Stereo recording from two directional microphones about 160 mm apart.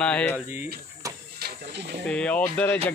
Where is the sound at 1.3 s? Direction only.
85° right.